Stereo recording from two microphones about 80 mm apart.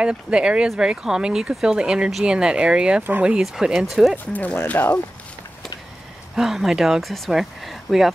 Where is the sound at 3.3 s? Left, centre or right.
Centre.